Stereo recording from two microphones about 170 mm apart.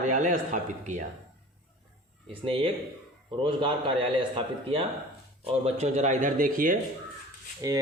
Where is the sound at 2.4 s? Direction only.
35° right (ahead or behind); by 6.7 s 55° right (ahead or behind).